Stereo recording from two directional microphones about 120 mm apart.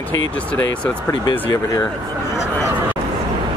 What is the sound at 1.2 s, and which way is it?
Speech, 35° left (ahead or behind).